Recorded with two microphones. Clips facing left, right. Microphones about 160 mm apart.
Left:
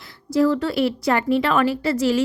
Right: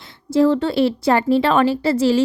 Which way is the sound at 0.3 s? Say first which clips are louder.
Right 3 dB; 25° right (ahead or behind).